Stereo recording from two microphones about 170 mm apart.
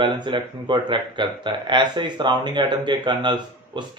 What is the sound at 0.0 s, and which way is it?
Speech, 30° right (ahead or behind).